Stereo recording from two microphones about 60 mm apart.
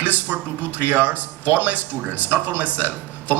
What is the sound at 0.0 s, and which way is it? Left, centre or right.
Speech, right.